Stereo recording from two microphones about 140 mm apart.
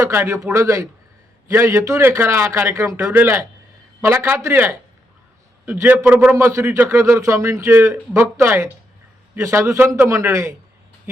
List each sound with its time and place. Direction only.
0.0 s a man's voice: 20° right (ahead or behind)